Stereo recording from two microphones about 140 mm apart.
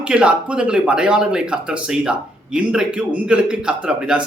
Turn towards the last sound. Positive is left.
turn(degrees=-5)  # may be behind; listen again after turning